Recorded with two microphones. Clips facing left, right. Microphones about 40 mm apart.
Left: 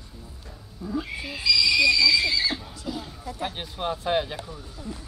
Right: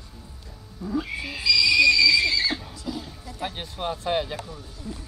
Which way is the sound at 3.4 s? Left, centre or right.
Centre.